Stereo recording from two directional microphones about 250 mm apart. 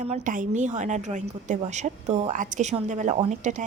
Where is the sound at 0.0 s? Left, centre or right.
Right.